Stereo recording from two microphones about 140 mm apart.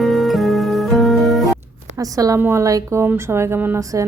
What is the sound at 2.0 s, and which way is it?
A woman's voice, 25° right (ahead or behind).